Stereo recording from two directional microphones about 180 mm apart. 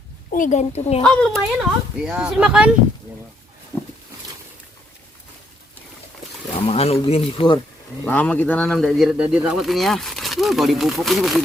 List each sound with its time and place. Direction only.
0.3 s speech: 45° left (ahead or behind)
1.0 s speech: 5° left (ahead or behind)
3.7 s a sound: 15° left (ahead or behind)
6.7 s speech: 35° left (ahead or behind)
8.0 s speech: 10° left (ahead or behind)